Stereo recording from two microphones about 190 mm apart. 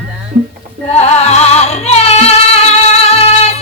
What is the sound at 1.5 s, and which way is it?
Music, 35° left (ahead or behind).